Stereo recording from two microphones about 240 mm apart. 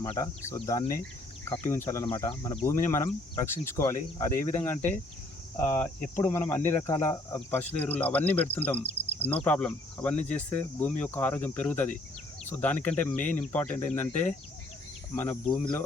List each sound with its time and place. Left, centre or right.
0.0 s speech: centre